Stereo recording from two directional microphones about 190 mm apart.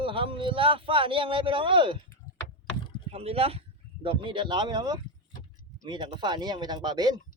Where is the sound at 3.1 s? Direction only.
30° right (ahead or behind).